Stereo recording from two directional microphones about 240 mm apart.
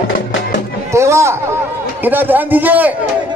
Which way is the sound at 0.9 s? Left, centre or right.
Centre.